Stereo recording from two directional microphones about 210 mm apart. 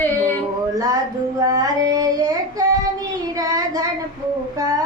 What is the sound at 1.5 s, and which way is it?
Child singing, 15° right (ahead or behind).